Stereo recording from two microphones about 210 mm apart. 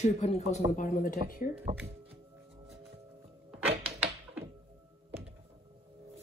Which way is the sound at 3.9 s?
5° right (ahead or behind).